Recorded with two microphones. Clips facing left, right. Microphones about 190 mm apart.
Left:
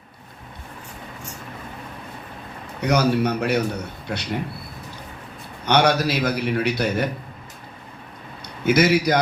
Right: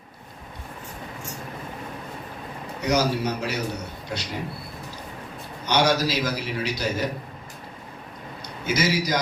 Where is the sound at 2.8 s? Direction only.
60° left (ahead or behind).